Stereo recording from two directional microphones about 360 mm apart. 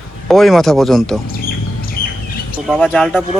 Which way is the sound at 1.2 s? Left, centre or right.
Left.